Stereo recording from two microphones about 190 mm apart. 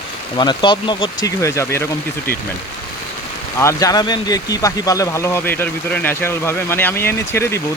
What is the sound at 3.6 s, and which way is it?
Speech, 15° left (ahead or behind).